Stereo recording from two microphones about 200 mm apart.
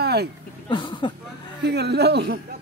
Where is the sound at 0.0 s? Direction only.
55° right (ahead or behind).